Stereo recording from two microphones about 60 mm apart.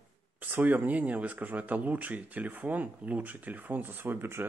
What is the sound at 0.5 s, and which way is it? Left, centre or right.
Speech, right.